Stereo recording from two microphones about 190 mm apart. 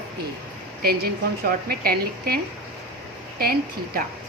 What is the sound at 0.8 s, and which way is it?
Speech, 50° right (ahead or behind).